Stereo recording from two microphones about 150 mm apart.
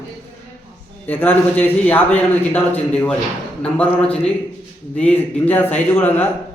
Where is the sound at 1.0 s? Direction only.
15° left (ahead or behind).